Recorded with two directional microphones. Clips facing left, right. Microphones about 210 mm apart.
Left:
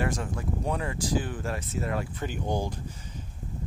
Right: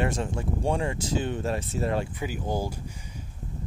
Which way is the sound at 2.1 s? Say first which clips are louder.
Even; 10° right (ahead or behind).